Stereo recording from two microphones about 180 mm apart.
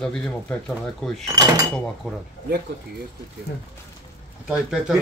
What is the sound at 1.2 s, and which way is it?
Speech, 20° right (ahead or behind).